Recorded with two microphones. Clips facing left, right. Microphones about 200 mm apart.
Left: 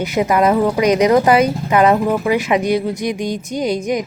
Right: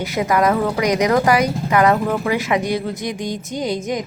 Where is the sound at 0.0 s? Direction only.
20° left (ahead or behind).